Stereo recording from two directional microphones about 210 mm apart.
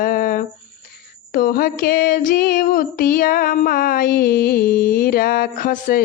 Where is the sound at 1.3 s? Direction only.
45° left (ahead or behind).